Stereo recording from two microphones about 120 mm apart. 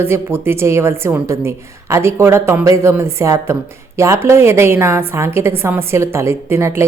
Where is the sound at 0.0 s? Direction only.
20° right (ahead or behind).